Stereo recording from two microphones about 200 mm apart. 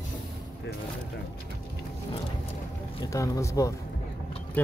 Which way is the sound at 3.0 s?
15° left (ahead or behind).